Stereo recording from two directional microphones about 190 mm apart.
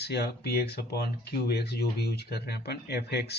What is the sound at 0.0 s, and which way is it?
Speech, 60° left (ahead or behind).